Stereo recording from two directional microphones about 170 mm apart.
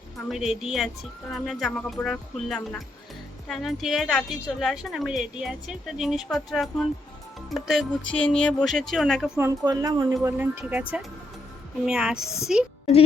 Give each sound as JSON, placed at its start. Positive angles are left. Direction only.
{"t": 0.3, "sound": "speech", "side_deg": 0}
{"t": 9.4, "sound": "speech", "side_deg": -20}
{"t": 10.2, "sound": "speech", "side_deg": -10}
{"t": 11.9, "sound": "speech", "side_deg": -5}